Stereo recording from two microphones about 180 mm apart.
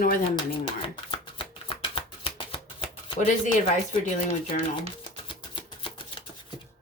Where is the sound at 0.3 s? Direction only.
30° left (ahead or behind).